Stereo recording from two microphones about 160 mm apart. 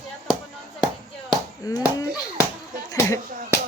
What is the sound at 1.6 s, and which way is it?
Speech, 20° left (ahead or behind).